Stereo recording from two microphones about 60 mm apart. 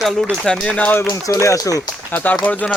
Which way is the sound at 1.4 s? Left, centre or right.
Left.